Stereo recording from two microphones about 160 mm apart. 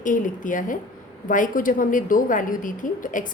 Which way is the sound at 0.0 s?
55° left (ahead or behind).